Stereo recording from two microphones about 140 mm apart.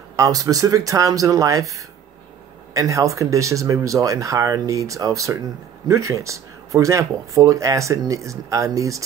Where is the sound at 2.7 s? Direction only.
25° right (ahead or behind).